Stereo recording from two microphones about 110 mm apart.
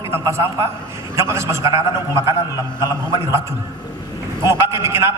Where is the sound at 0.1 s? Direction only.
25° right (ahead or behind).